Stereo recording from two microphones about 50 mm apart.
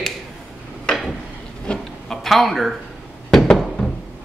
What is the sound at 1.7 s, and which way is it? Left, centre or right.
Speech, left.